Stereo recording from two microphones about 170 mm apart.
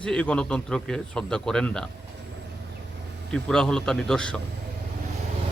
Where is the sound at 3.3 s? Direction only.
5° left (ahead or behind).